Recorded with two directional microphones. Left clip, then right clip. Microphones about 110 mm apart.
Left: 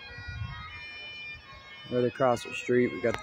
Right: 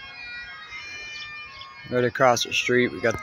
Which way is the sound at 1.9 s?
15° right (ahead or behind).